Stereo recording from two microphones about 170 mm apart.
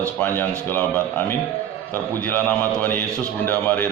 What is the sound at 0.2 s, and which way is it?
Speech, 10° left (ahead or behind).